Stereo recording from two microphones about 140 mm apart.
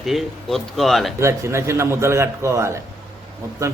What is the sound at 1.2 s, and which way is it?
A man's voice, 20° right (ahead or behind).